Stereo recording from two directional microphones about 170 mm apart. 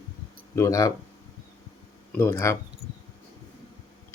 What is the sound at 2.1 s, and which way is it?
Speech, 15° left (ahead or behind).